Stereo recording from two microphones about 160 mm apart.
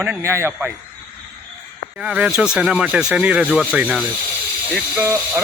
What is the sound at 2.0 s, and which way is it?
Speech, 5° right (ahead or behind).